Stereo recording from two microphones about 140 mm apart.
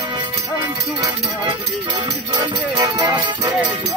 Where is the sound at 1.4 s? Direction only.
35° right (ahead or behind).